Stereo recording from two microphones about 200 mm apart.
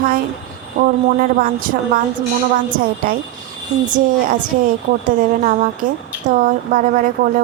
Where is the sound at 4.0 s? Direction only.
40° right (ahead or behind).